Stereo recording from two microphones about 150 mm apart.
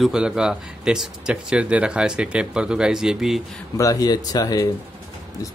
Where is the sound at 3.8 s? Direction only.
25° left (ahead or behind).